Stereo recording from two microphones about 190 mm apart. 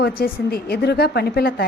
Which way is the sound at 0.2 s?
55° left (ahead or behind).